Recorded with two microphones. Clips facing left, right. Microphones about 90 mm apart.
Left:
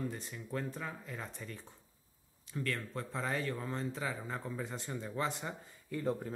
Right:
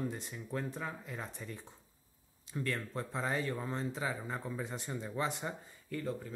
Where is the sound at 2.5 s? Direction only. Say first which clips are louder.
Right 1 dB; 20° right (ahead or behind).